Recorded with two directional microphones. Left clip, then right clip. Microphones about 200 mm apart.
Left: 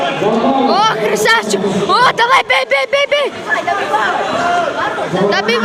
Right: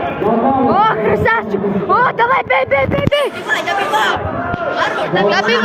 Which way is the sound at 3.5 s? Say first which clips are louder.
Left 1 dB; 20° right (ahead or behind).